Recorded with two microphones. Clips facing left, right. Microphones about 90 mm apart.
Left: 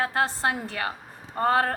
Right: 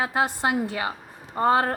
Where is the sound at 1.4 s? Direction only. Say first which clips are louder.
Right 2 dB; 20° right (ahead or behind).